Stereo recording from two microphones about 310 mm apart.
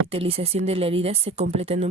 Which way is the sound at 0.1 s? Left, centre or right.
Centre.